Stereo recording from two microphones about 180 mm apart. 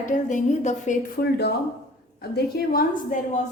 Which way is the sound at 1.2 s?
65° left (ahead or behind).